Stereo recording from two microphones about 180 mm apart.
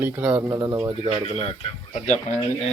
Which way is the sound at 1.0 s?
30° right (ahead or behind).